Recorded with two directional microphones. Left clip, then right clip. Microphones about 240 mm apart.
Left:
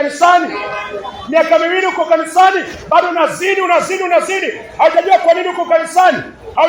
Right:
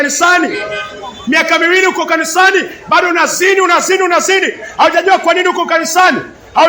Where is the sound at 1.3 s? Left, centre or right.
Right.